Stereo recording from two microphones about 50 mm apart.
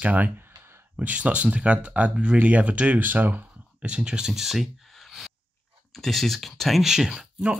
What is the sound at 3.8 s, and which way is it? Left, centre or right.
Speech, right.